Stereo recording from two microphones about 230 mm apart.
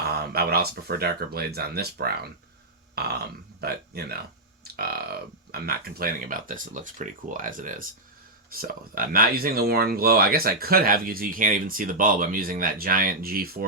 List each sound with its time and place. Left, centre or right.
0.2 s speech: right
2.9 s burping: right
3.6 s speech: right